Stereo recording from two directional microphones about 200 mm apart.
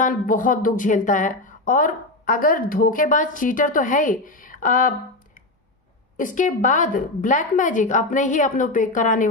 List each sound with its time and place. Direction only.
0.0 s speech: 40° left (ahead or behind)
6.1 s speech: 40° left (ahead or behind)